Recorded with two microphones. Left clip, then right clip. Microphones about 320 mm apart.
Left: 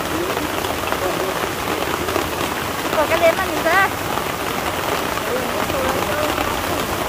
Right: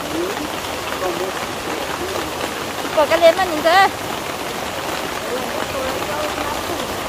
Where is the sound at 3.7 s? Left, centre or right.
Centre.